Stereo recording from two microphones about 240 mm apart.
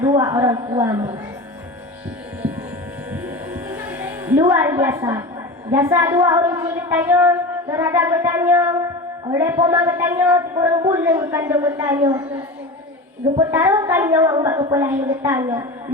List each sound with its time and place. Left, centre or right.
0.0 s a woman's voice: centre
3.1 s a sound: centre
5.7 s a woman's voice: centre
13.5 s a woman's voice: centre